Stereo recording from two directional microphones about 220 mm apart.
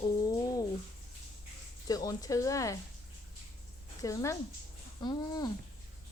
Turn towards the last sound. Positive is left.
turn(degrees=20)  # may be behind; listen again after turning